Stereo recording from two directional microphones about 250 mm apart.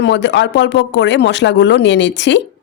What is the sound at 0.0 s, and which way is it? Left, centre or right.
A woman's voice, left.